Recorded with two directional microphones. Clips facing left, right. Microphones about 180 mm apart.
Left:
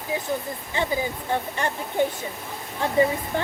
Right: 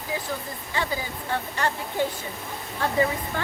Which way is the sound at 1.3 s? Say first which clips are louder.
Right 2 dB; 20° left (ahead or behind).